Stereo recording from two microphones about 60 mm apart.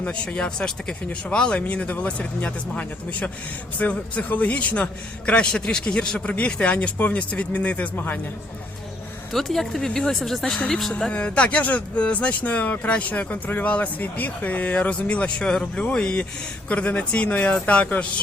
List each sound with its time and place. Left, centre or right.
0.0 s speech: centre
5.5 s speech: centre
7.9 s speech: left
9.3 s speech: centre
11.1 s speech: centre